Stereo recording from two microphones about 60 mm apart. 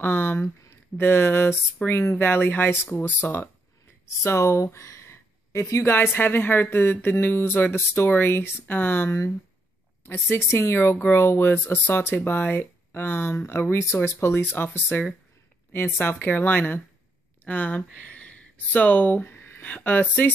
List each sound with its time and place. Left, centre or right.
0.0 s speech: left
4.0 s speech: left
5.9 s speech: left
10.2 s speech: left
10.8 s speech: left
11.6 s speech: left